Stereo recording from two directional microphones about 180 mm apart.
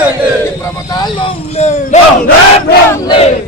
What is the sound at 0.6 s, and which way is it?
Vehicle, 20° left (ahead or behind).